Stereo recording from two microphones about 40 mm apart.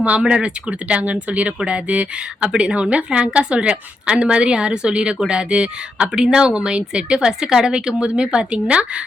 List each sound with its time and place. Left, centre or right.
0.2 s speech: right